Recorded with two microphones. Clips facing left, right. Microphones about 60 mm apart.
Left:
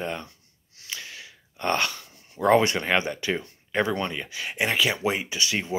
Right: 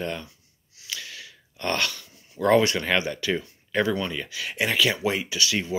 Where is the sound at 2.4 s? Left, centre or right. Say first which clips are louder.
Even; left.